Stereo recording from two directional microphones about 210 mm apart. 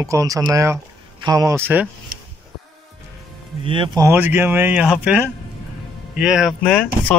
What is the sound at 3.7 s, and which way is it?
Speech, 25° right (ahead or behind).